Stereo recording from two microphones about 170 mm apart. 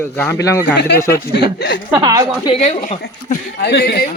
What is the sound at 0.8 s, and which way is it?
Speech, 80° left.